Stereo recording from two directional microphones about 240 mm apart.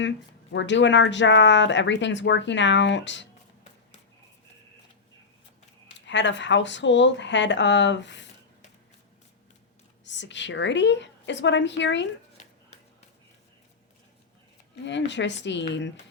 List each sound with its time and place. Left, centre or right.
0.5 s speech: left
6.1 s speech: left
10.0 s speech: left
14.8 s speech: left